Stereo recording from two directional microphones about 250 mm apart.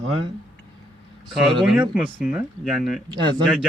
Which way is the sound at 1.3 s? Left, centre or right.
Centre.